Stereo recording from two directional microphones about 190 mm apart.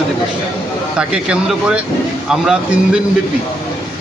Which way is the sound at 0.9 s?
5° right (ahead or behind).